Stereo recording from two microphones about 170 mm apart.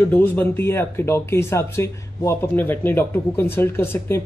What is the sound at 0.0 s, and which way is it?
Speech, 10° left (ahead or behind).